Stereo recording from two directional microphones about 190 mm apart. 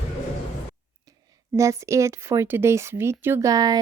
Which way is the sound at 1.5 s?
15° right (ahead or behind).